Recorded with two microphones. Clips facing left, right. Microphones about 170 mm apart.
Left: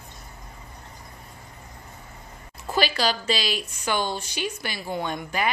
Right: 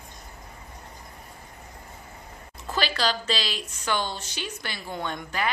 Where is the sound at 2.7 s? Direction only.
10° left (ahead or behind).